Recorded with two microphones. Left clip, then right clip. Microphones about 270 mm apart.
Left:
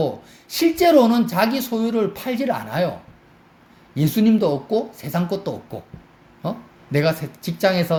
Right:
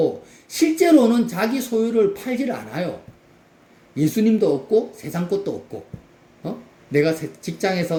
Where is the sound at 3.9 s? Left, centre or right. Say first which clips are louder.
Even; left.